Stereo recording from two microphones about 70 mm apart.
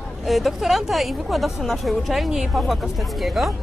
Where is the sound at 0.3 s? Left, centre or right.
Centre.